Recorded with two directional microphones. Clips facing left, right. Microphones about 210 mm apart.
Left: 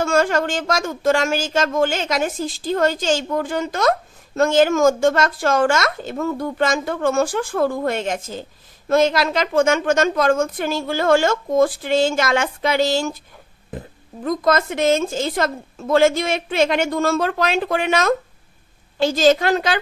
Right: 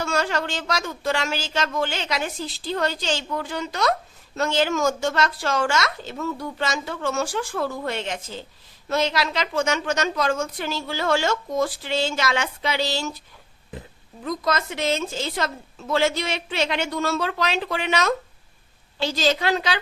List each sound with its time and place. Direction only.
0.0 s a woman's voice: 50° left (ahead or behind)